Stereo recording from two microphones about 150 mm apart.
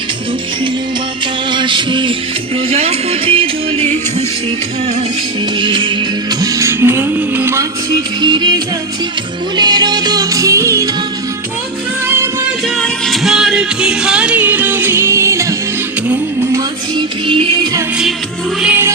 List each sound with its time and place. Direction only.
1.5 s music: 30° right (ahead or behind)
5.5 s music: 35° right (ahead or behind)
6.4 s music: 20° right (ahead or behind)
8.2 s music: 30° right (ahead or behind)
12.0 s music: 15° right (ahead or behind)
12.6 s music: centre (ahead or behind); by 17.7 s 35° right (ahead or behind)
18.6 s music: 15° right (ahead or behind)